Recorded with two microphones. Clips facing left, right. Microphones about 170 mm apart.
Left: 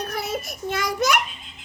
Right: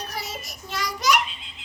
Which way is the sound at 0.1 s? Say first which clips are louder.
Left 6 dB; 55° left (ahead or behind).